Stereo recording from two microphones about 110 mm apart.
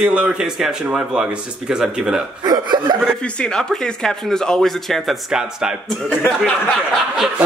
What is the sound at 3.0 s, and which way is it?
Speech, 5° left (ahead or behind).